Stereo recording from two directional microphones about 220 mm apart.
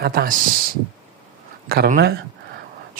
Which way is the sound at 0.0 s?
45° right (ahead or behind).